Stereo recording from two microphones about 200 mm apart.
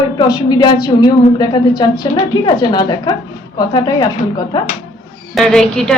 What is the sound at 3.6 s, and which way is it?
A woman's voice, 20° left (ahead or behind).